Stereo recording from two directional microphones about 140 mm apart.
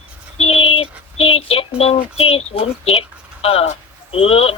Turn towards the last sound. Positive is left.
turn(degrees=45)  # may be behind; listen again after turning